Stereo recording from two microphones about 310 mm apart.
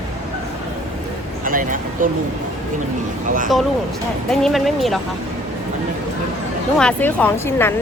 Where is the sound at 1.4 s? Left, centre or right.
Right.